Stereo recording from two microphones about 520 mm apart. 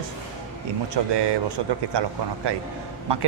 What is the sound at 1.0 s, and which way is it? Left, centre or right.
A man's voice, right.